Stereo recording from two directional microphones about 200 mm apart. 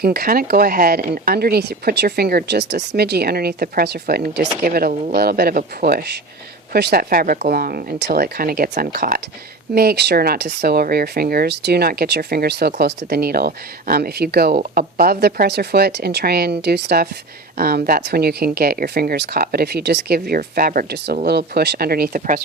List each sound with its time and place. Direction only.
0.0 s speech: 50° right (ahead or behind)